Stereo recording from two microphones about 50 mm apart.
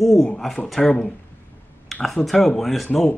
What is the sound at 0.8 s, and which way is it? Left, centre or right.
Speech, left.